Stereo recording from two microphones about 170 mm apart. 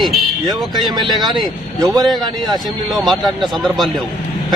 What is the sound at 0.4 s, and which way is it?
Speech, 25° right (ahead or behind).